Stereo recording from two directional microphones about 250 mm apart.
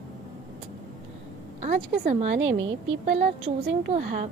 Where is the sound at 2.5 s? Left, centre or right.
Right.